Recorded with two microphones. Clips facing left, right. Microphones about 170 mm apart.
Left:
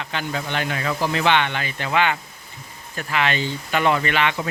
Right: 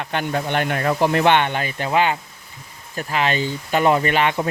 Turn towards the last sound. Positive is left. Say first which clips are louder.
# right 3 dB
turn(degrees=-45)  # may be behind; listen again after turning